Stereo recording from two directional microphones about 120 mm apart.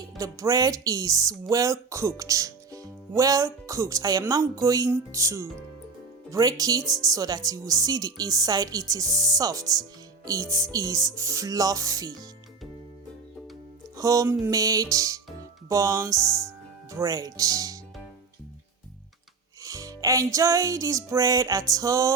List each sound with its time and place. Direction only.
0.2 s speech: 30° right (ahead or behind)
13.9 s music: 30° right (ahead or behind)
14.4 s speech: 30° right (ahead or behind)
19.6 s speech: 30° right (ahead or behind)